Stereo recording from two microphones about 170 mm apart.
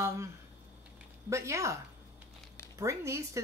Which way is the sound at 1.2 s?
15° right (ahead or behind).